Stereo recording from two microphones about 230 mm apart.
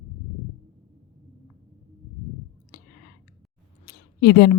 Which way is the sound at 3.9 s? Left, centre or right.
Left.